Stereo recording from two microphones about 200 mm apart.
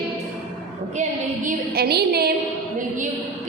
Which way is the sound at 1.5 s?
50° right (ahead or behind).